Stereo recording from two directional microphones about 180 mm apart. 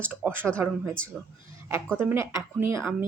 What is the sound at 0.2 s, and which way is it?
Speech, 10° right (ahead or behind).